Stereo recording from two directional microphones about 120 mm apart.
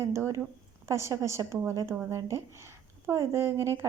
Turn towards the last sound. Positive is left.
turn(degrees=-20)  # may be behind; listen again after turning